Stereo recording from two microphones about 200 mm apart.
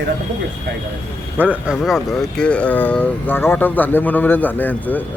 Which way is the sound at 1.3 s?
10° right (ahead or behind).